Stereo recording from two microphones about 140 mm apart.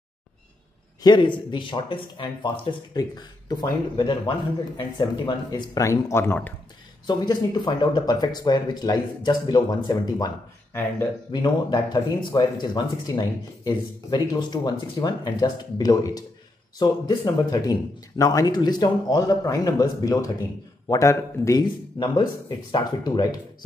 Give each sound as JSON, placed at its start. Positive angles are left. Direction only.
{"t": 1.0, "sound": "speech", "side_deg": 35}
{"t": 7.1, "sound": "speech", "side_deg": 30}
{"t": 11.4, "sound": "speech", "side_deg": 30}